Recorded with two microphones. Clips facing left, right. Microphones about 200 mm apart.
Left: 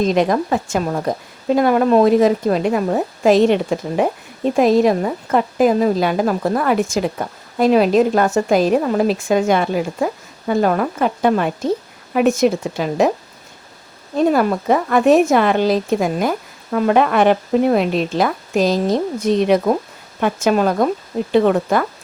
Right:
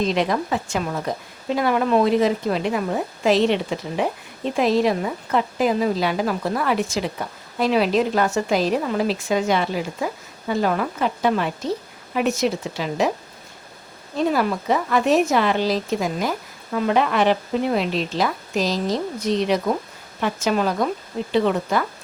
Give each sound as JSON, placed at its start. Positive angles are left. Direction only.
{"t": 0.0, "sound": "a woman's voice", "side_deg": 45}
{"t": 14.2, "sound": "a woman's voice", "side_deg": 50}